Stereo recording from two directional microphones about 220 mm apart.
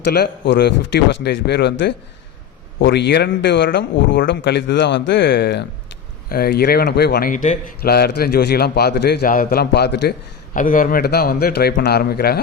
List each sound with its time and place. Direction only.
0.0 s speech: 50° left (ahead or behind)
2.7 s speech: 50° left (ahead or behind)